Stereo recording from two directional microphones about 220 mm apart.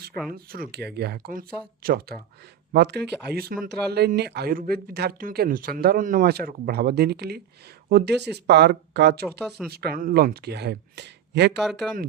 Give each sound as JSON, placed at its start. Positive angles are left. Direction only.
{"t": 0.3, "sound": "speech", "side_deg": -40}
{"t": 11.6, "sound": "speech", "side_deg": 0}